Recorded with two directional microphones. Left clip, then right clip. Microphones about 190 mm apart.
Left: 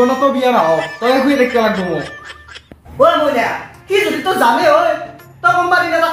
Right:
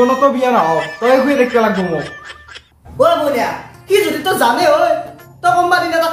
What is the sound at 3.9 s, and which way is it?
Speech, 25° right (ahead or behind).